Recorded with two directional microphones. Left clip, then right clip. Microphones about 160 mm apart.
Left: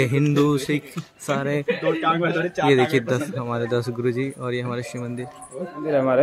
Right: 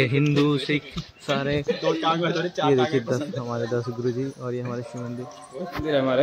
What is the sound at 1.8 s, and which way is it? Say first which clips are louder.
Speech: left 2 dB; 70° left (ahead or behind).